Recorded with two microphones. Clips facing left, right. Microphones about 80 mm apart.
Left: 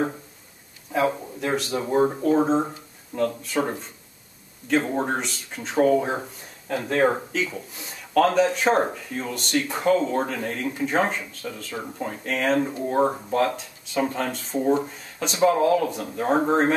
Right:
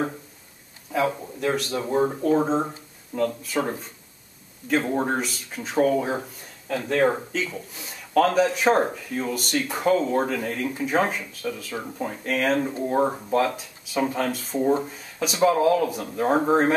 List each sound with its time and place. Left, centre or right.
0.9 s speech: centre
6.7 s speech: centre
7.4 s speech: centre